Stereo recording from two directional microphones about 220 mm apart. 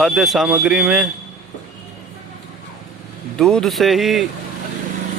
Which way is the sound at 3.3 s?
5° left (ahead or behind).